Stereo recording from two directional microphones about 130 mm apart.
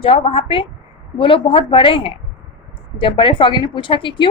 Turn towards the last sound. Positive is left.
turn(degrees=40)  # may be behind; listen again after turning